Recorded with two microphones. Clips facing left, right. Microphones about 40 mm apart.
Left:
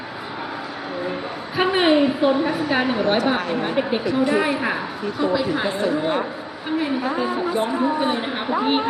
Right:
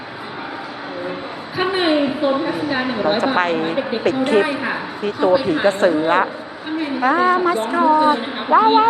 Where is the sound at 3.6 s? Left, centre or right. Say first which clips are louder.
Right 2 dB; centre.